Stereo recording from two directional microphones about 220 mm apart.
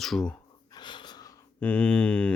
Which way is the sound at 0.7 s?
20° left (ahead or behind).